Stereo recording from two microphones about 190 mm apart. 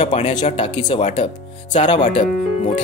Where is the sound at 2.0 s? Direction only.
40° left (ahead or behind).